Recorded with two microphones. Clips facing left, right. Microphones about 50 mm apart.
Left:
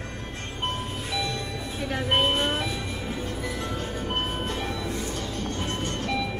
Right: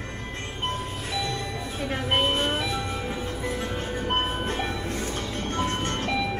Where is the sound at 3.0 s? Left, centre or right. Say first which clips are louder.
Right 1 dB; right.